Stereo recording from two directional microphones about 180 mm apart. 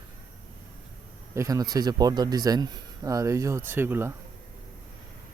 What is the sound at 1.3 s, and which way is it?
A man's voice, 20° right (ahead or behind).